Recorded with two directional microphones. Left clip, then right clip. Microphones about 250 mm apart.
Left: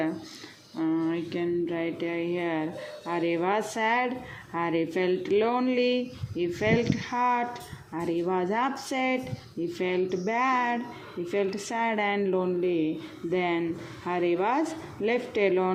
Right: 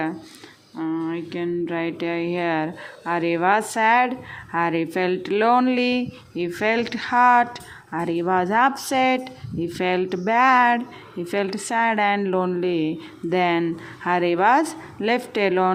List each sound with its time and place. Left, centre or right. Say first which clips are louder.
0.8 s speech: right 1 dB; centre